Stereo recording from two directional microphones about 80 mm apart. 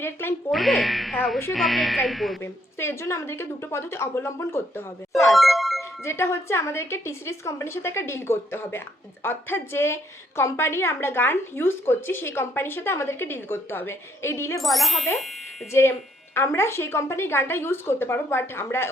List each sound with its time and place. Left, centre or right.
0.0 s speech: left
0.5 s speech: centre
2.4 s a woman's voice: left
5.3 s music: centre
6.0 s a woman's voice: left
14.6 s speech: centre
15.7 s a woman's voice: left